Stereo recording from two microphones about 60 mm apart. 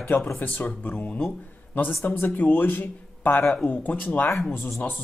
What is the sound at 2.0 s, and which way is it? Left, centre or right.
Speech, left.